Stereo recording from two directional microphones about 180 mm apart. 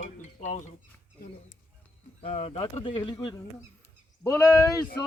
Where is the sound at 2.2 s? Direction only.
35° left (ahead or behind).